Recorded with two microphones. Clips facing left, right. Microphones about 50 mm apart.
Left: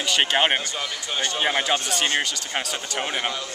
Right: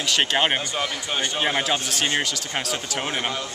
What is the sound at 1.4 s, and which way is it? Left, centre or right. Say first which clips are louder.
Speech: left 2 dB; centre.